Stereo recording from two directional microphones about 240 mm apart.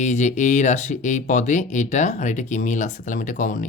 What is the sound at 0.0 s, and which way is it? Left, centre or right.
Speech, left.